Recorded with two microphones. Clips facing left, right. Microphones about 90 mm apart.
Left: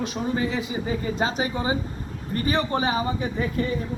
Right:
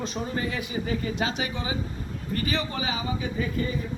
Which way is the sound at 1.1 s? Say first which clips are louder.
Left 4 dB; 35° left (ahead or behind).